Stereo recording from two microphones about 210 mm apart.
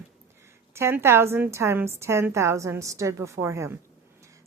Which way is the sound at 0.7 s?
10° right (ahead or behind).